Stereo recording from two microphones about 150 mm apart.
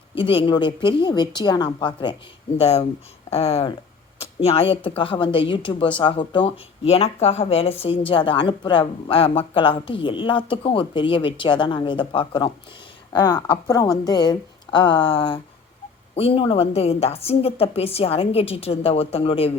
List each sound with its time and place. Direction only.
0.2 s speech: 35° left (ahead or behind)
2.6 s speech: 45° left (ahead or behind)